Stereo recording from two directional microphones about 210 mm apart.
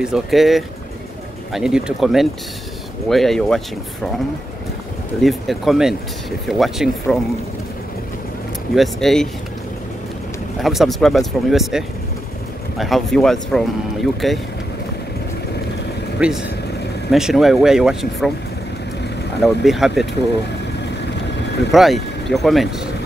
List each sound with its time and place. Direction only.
0.0 s speech: centre (ahead or behind)
5.2 s speech: centre (ahead or behind)
8.7 s speech: centre (ahead or behind)
10.6 s speech: centre (ahead or behind)
16.2 s speech: 5° right (ahead or behind)
19.4 s speech: centre (ahead or behind)
20.8 s vehicle: 55° left (ahead or behind)
21.7 s speech: centre (ahead or behind)